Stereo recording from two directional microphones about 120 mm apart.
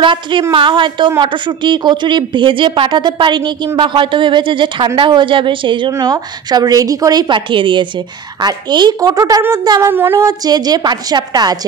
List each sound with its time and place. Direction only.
0.0 s a woman's voice: 40° right (ahead or behind)
5.9 s a woman's voice: 30° right (ahead or behind)
10.2 s a woman's voice: 35° right (ahead or behind)